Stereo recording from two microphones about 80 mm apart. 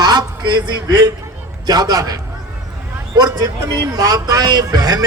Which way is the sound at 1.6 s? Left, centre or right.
Right.